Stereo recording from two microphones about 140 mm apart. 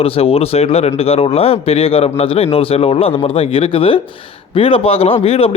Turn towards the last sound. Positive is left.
turn(degrees=45)  # may be behind; listen again after turning